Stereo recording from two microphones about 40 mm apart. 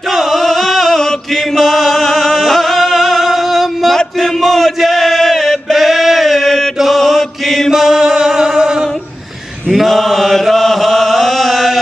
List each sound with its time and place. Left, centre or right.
0.1 s chant: centre
1.6 s chant: centre
2.5 s music: centre
4.2 s chant: centre
6.8 s chant: centre
7.7 s chant: centre
8.4 s music: centre
9.7 s chant: centre